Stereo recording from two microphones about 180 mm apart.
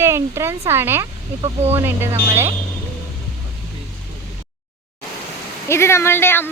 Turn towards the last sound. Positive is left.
turn(degrees=10)  # may be behind; listen again after turning